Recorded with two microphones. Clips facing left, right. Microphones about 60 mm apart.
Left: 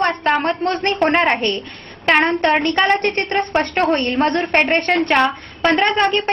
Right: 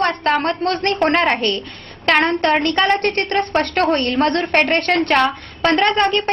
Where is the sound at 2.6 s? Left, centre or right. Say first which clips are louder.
Even; left.